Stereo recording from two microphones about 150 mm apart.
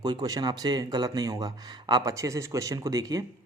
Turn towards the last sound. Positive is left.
turn(degrees=-25)  # may be behind; listen again after turning